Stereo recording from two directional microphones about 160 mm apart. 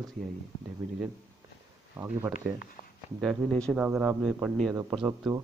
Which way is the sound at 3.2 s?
Centre (ahead or behind).